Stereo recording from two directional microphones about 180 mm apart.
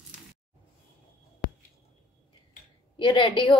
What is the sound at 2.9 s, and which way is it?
Speech, 30° left (ahead or behind).